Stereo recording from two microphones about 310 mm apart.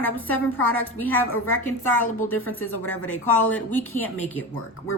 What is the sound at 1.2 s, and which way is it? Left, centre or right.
Speech, left.